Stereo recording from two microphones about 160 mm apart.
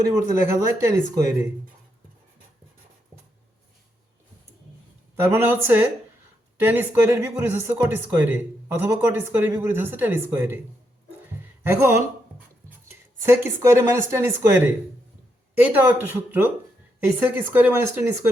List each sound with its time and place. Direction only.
0.1 s speech: 20° right (ahead or behind)
5.1 s speech: 15° right (ahead or behind)
11.6 s speech: 15° right (ahead or behind)